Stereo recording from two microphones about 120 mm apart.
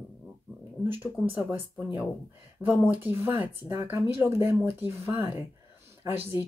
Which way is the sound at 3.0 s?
15° right (ahead or behind).